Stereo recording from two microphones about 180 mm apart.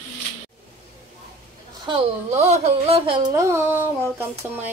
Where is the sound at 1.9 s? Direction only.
35° right (ahead or behind).